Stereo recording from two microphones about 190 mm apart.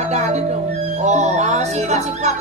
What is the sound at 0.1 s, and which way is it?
Music, 35° right (ahead or behind).